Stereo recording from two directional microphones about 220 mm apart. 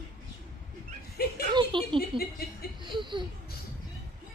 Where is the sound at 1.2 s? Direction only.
45° left (ahead or behind).